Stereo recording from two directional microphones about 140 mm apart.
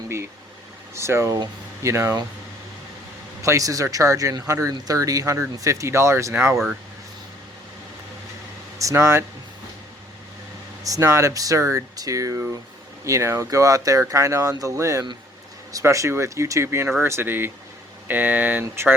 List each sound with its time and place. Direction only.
0.9 s speech: 20° right (ahead or behind)
3.4 s speech: 25° right (ahead or behind)
8.8 s speech: 20° right (ahead or behind)
10.8 s speech: 25° right (ahead or behind)